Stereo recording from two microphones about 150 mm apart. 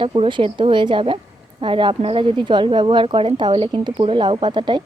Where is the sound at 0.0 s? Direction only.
35° right (ahead or behind).